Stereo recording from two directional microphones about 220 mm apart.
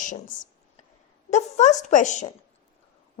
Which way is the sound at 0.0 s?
35° left (ahead or behind).